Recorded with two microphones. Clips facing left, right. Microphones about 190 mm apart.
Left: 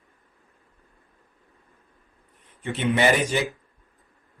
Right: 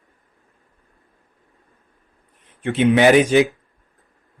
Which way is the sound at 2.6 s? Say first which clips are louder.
Right 7 dB; 80° right.